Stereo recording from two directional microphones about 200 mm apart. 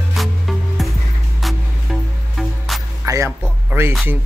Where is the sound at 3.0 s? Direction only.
15° right (ahead or behind).